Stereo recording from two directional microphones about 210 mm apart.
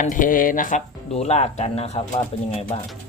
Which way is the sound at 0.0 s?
40° left (ahead or behind).